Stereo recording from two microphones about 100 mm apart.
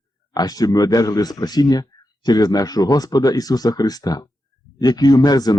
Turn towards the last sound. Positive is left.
turn(degrees=40)  # may be behind; listen again after turning